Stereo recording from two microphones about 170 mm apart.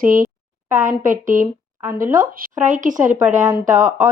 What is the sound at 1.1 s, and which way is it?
Speech, 50° right (ahead or behind).